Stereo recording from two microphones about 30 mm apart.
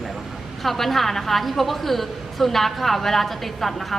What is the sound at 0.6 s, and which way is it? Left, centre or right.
A woman's voice, centre.